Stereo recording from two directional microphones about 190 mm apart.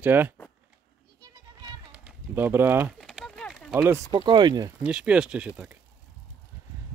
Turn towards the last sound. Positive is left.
turn(degrees=-5)  # may be behind; listen again after turning